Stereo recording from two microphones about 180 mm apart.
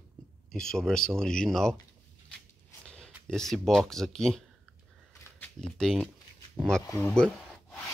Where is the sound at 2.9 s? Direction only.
5° left (ahead or behind).